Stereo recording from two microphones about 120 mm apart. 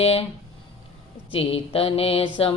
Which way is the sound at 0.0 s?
55° left (ahead or behind).